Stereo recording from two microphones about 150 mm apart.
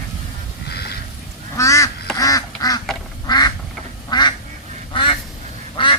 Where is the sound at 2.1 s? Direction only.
25° left (ahead or behind).